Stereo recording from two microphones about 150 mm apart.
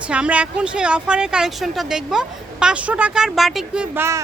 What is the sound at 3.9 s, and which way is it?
Speech, 15° right (ahead or behind).